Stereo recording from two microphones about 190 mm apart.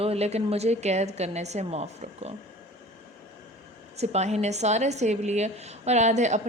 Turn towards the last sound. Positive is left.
turn(degrees=-40)  # may be behind; listen again after turning